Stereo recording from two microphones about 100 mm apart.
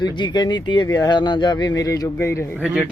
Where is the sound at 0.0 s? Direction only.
45° left (ahead or behind).